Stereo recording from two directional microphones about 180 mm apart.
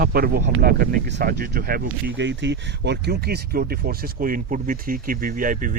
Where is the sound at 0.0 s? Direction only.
55° right (ahead or behind).